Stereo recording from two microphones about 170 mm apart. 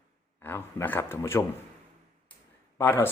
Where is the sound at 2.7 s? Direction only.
15° left (ahead or behind).